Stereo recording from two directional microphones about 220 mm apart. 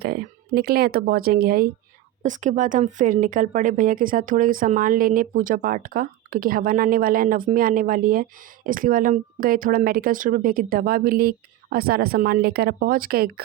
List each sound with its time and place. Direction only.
0.0 s speech: 45° right (ahead or behind)